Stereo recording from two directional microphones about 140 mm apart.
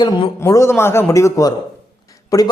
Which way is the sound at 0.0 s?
30° left (ahead or behind).